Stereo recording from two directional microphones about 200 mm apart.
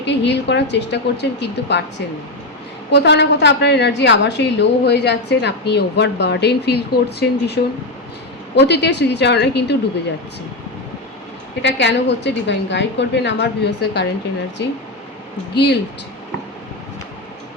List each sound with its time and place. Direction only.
0.0 s a woman's voice: 60° left (ahead or behind)
2.9 s a woman's voice: 60° left (ahead or behind)
11.6 s a woman's voice: 60° left (ahead or behind)
15.5 s a woman's voice: 55° left (ahead or behind)